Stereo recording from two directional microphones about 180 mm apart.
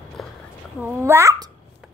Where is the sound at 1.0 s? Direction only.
15° right (ahead or behind).